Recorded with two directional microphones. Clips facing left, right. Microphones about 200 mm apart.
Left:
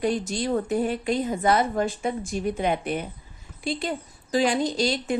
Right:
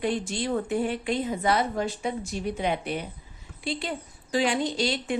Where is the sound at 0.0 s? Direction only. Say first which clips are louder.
Left 3 dB; 40° left (ahead or behind).